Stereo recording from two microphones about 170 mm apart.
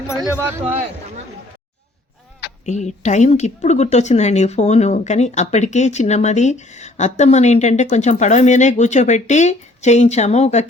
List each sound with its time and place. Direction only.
0.2 s speech: 15° right (ahead or behind)
2.6 s a woman's voice: 45° left (ahead or behind)